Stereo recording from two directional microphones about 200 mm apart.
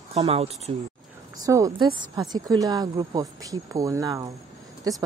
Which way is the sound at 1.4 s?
15° right (ahead or behind).